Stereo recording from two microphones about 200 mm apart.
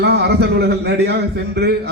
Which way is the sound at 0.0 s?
55° right (ahead or behind).